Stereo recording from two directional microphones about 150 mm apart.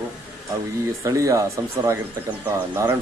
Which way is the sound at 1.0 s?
20° right (ahead or behind).